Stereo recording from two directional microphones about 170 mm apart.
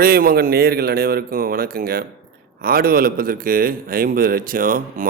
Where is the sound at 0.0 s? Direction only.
60° right (ahead or behind).